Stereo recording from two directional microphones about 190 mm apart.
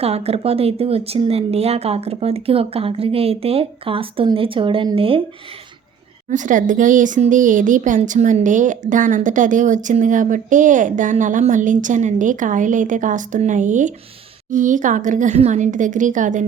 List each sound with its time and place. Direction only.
0.0 s speech: 30° right (ahead or behind)
6.3 s speech: 40° right (ahead or behind)